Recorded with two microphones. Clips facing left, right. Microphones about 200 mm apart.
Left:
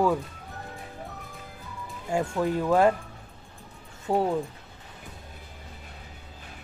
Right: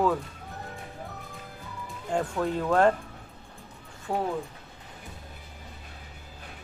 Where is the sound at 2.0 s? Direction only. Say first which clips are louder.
Left 2 dB; 10° left (ahead or behind).